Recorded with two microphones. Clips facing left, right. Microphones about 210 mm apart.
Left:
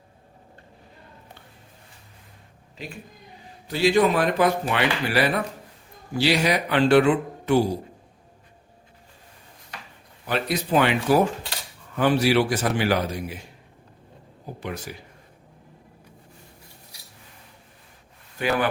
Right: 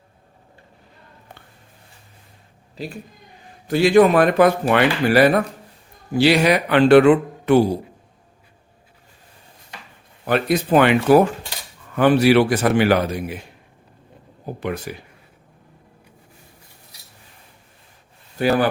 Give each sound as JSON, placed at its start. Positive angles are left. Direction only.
{"t": 3.7, "sound": "speech", "side_deg": -50}
{"t": 6.1, "sound": "a man's voice", "side_deg": -60}
{"t": 10.2, "sound": "a man's voice", "side_deg": -55}
{"t": 14.6, "sound": "a man's voice", "side_deg": -60}
{"t": 18.3, "sound": "speech", "side_deg": -40}